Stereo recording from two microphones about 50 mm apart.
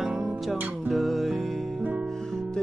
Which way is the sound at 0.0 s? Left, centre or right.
Centre.